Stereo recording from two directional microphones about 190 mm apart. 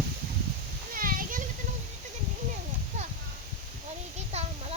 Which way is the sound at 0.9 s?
45° right (ahead or behind).